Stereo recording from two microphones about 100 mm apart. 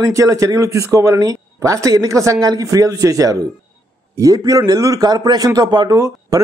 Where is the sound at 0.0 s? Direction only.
35° right (ahead or behind).